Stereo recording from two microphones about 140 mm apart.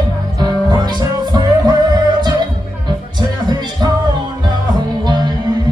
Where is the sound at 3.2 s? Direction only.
30° right (ahead or behind).